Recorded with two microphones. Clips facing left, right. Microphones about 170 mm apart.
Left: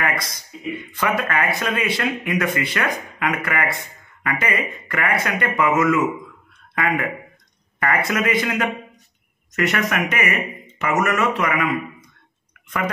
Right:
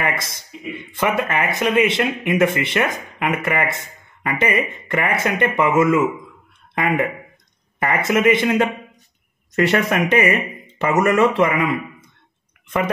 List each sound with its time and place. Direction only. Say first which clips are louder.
0.0 s speech: right 1 dB; 25° right (ahead or behind)